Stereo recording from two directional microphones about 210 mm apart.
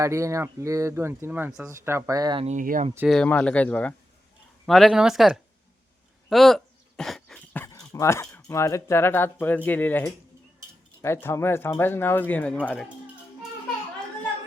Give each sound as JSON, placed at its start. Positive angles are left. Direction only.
{"t": 0.0, "sound": "speech", "side_deg": -15}
{"t": 2.5, "sound": "speech", "side_deg": -40}
{"t": 3.1, "sound": "speech", "side_deg": 5}
{"t": 6.2, "sound": "a sound", "side_deg": 0}
{"t": 8.4, "sound": "speech", "side_deg": 15}